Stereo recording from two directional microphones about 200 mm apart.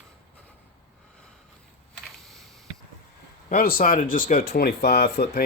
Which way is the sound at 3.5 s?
45° left (ahead or behind).